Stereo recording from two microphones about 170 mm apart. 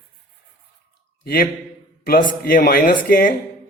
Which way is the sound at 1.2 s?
65° left (ahead or behind).